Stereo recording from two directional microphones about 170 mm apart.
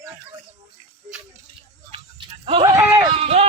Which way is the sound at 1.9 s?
30° right (ahead or behind).